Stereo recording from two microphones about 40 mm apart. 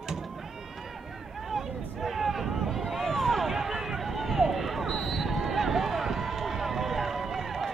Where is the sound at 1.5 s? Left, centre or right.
Centre.